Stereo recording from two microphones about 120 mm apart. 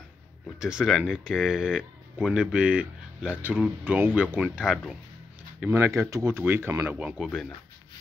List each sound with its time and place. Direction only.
0.6 s speech: 5° right (ahead or behind); by 7.0 s 20° right (ahead or behind)
7.0 s speech: 10° right (ahead or behind)
7.2 s speech: 5° left (ahead or behind)